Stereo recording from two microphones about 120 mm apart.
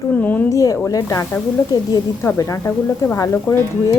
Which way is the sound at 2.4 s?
25° left (ahead or behind).